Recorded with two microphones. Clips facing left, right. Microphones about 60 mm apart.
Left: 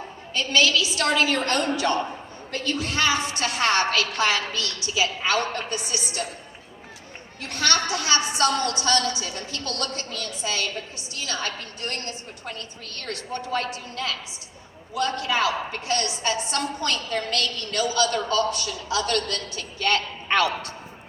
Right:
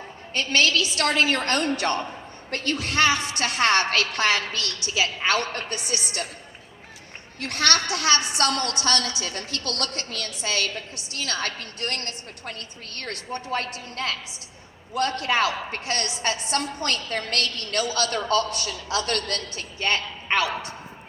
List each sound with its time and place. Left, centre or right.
0.3 s a woman's voice: right
7.3 s a woman's voice: right
20.2 s a man's voice: centre